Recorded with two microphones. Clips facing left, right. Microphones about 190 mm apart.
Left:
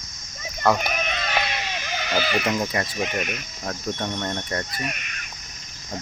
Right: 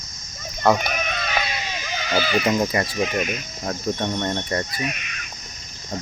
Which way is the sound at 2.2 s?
5° left (ahead or behind).